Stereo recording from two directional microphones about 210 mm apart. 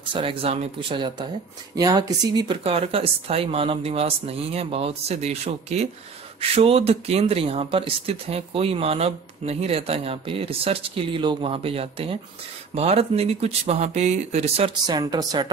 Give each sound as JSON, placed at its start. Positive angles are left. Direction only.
{"t": 0.1, "sound": "speech", "side_deg": -25}